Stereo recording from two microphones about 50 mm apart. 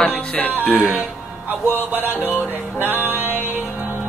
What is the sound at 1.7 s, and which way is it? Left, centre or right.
Music, right.